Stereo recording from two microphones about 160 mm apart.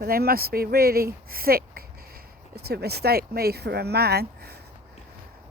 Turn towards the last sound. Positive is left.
turn(degrees=-90)